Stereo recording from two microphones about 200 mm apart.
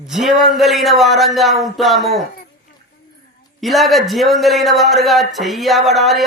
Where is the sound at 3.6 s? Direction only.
Centre (ahead or behind).